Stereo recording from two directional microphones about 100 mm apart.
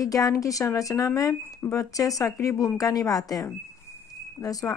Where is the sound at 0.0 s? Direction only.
35° left (ahead or behind).